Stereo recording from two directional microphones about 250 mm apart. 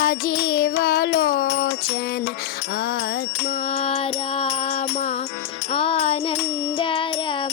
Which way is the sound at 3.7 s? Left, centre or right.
Left.